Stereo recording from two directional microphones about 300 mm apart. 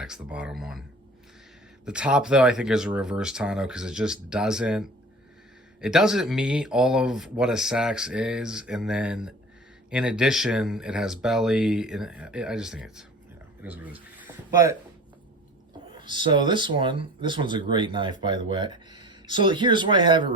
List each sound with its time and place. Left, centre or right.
0.0 s speech: centre
1.8 s speech: centre
14.2 s a sound: centre
16.0 s speech: centre